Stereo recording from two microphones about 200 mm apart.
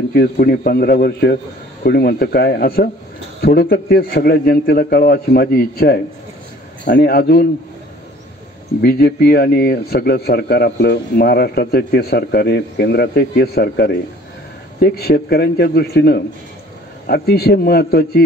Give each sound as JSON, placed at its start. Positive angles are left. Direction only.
{"t": 0.1, "sound": "a man's voice", "side_deg": 50}
{"t": 8.8, "sound": "a man's voice", "side_deg": 50}